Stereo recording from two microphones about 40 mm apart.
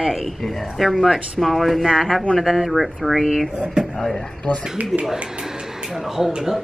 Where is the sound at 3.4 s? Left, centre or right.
Centre.